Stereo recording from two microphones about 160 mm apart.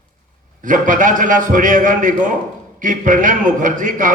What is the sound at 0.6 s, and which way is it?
A man's voice, 55° right (ahead or behind).